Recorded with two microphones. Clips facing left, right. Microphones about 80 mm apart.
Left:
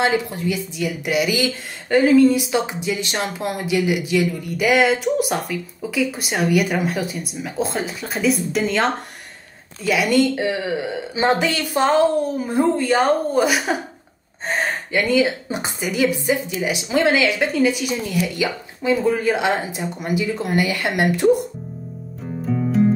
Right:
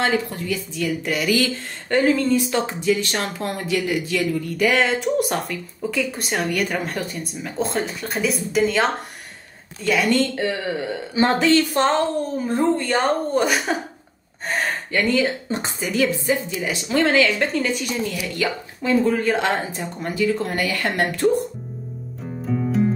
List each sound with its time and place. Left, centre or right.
0.0 s speech: centre
2.0 s speech: centre
11.7 s a woman's voice: centre
14.5 s a woman's voice: left
22.2 s music: centre